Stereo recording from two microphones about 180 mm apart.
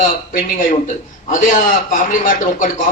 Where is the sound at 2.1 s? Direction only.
45° left (ahead or behind).